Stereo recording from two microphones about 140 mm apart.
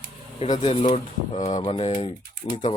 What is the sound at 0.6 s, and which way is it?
Speech, 45° left (ahead or behind).